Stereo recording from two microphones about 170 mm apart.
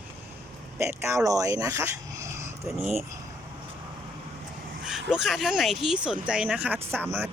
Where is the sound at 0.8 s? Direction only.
15° right (ahead or behind).